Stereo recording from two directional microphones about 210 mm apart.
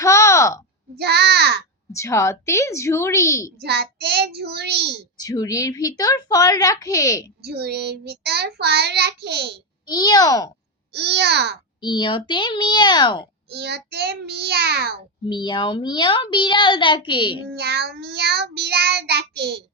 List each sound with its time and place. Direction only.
0.0 s a sound: 15° left (ahead or behind)
0.9 s child singing: 50° right (ahead or behind)
1.9 s a woman's voice: 15° left (ahead or behind)
3.6 s child singing: 50° right (ahead or behind)
5.1 s a woman's voice: 15° left (ahead or behind)
7.4 s child singing: 50° right (ahead or behind)
9.8 s a woman's voice: 20° left (ahead or behind)
10.9 s child singing: 50° right (ahead or behind)
11.8 s a child's voice: 20° left (ahead or behind)
13.5 s child singing: 50° right (ahead or behind)
15.3 s a child's voice: 20° left (ahead or behind)
17.5 s child singing: 50° right (ahead or behind)